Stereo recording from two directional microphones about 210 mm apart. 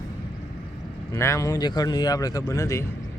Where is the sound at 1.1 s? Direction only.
15° left (ahead or behind).